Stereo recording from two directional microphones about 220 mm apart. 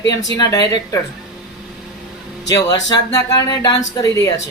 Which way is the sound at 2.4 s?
15° left (ahead or behind).